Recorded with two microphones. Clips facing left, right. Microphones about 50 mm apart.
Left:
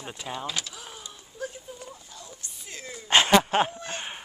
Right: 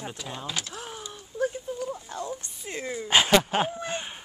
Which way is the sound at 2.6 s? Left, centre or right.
Right.